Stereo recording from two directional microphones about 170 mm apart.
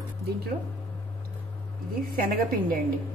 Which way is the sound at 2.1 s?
60° right (ahead or behind).